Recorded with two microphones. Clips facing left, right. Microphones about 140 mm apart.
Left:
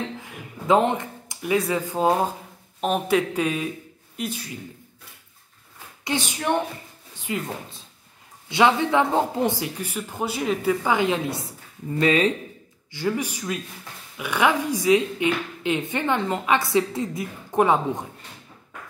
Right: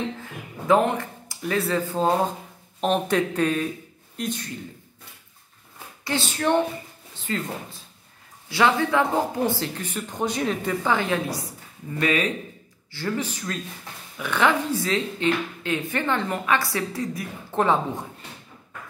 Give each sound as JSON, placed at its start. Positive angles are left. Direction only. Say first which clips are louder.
{"t": 0.2, "sound": "speech", "louder": "right 1 dB", "side_deg": 20}
{"t": 6.0, "sound": "a woman's voice", "louder": "right 1 dB", "side_deg": 15}
{"t": 12.9, "sound": "a woman's voice", "louder": "left 2 dB", "side_deg": 15}